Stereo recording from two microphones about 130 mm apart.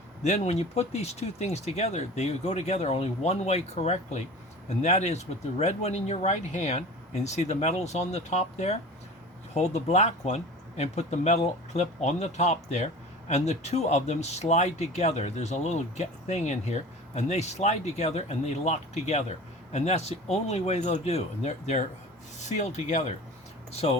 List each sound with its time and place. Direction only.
0.2 s speech: 60° left (ahead or behind)